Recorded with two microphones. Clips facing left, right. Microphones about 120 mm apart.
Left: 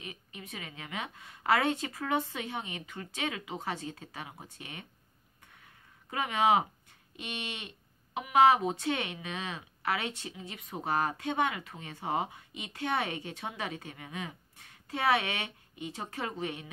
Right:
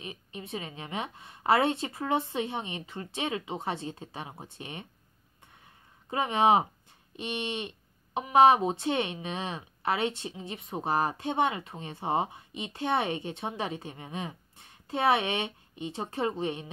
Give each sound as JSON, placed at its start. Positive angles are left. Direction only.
{"t": 0.0, "sound": "speech", "side_deg": -25}
{"t": 6.0, "sound": "speech", "side_deg": -25}